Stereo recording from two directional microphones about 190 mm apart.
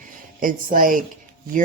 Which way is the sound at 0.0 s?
45° right (ahead or behind).